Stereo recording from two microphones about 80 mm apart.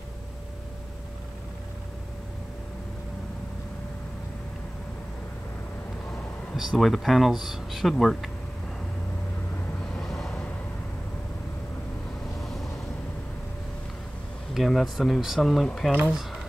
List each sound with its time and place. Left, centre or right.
6.5 s speech: centre
9.9 s vehicle: centre
12.4 s vehicle: centre
14.5 s speech: centre